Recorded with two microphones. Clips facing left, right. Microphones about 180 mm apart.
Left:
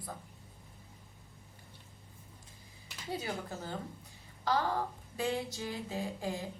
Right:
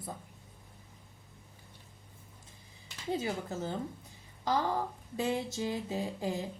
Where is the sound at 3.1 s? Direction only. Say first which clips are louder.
Right 4 dB; 25° right (ahead or behind).